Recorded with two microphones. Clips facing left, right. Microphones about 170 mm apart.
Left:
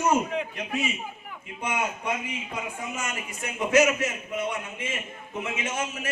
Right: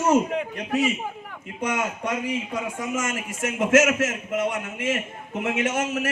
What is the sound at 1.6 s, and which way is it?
A man's voice, 80° right.